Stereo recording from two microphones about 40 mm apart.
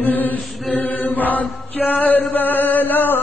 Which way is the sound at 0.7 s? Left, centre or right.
Left.